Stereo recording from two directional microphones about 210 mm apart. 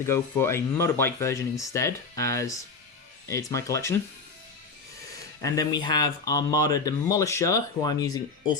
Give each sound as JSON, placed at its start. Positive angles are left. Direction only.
{"t": 0.0, "sound": "speech", "side_deg": 10}
{"t": 5.4, "sound": "speech", "side_deg": 15}